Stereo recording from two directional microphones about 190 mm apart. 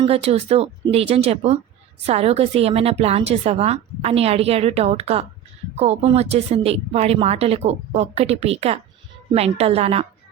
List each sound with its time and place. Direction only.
0.0 s a woman's voice: 30° right (ahead or behind)